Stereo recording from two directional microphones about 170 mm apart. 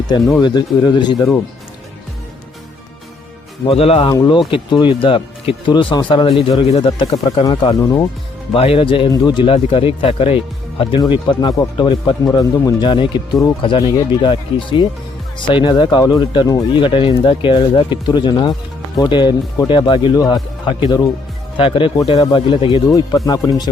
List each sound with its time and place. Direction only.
0.1 s speech: 25° left (ahead or behind)
3.7 s speech: 35° left (ahead or behind)
8.5 s speech: 35° left (ahead or behind)
21.6 s speech: 30° left (ahead or behind)